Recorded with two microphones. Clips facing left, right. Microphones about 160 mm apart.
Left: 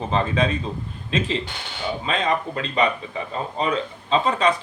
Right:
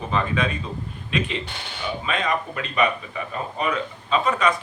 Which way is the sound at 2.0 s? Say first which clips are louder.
Left 2 dB; 30° left (ahead or behind).